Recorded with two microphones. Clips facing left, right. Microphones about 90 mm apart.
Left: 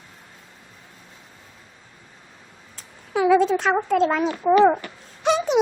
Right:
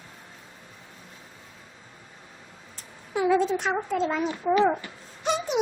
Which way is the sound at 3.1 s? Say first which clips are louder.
Left 5 dB; 90° left.